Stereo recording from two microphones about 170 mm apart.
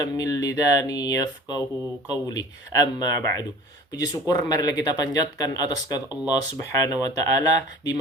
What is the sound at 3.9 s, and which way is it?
Speech, 20° left (ahead or behind).